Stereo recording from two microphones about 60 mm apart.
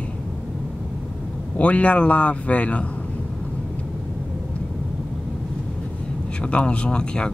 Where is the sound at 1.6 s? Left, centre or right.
Left.